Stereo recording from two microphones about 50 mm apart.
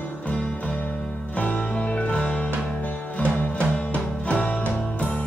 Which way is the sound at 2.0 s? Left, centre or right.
Left.